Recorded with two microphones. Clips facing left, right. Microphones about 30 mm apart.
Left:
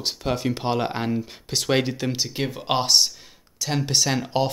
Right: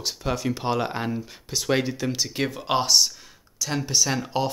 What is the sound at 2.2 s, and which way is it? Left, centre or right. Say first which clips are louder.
Speech: even; centre.